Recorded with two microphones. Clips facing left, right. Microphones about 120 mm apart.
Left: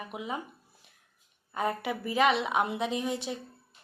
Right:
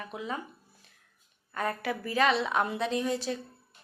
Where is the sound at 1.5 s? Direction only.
20° left (ahead or behind).